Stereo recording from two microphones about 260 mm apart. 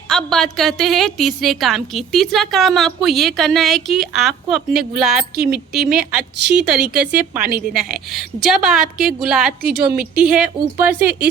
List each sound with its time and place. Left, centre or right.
0.1 s a woman's voice: centre
9.5 s a woman's voice: right
10.2 s a woman's voice: centre